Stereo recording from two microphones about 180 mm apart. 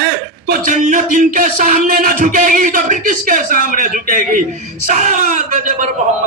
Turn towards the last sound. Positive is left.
turn(degrees=-45)  # may be behind; listen again after turning